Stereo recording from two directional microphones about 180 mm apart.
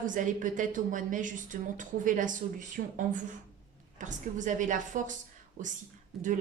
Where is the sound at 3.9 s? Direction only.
45° right (ahead or behind).